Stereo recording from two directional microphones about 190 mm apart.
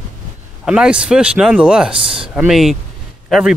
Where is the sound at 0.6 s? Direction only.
5° right (ahead or behind).